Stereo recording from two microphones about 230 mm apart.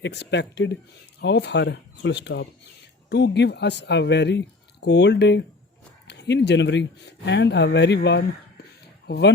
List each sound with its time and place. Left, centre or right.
0.0 s speech: left